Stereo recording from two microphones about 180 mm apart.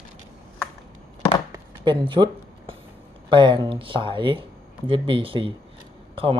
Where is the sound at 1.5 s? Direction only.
25° right (ahead or behind).